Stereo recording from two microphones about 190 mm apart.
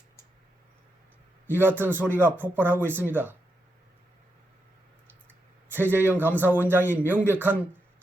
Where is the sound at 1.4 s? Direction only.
10° right (ahead or behind).